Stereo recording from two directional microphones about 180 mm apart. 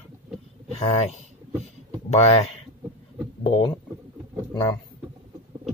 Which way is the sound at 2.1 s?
35° left (ahead or behind).